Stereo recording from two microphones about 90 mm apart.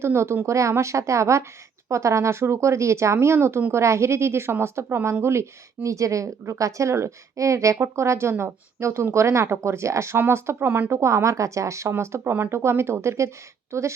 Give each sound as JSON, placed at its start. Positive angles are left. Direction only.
{"t": 0.0, "sound": "a woman's voice", "side_deg": -30}